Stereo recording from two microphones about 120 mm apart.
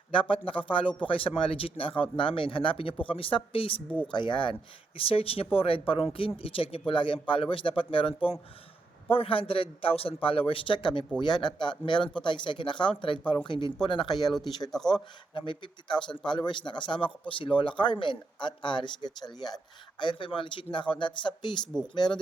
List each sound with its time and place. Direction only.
0.1 s a man's voice: 45° left (ahead or behind)
4.9 s a man's voice: 50° left (ahead or behind)
14.7 s speech: 5° left (ahead or behind)
15.4 s a man's voice: 45° left (ahead or behind)